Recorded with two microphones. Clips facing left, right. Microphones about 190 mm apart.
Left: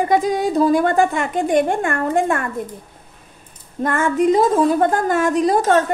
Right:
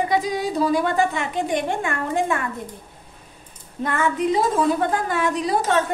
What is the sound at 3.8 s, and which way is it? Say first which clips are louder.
A woman's voice: left 5 dB; 45° left (ahead or behind).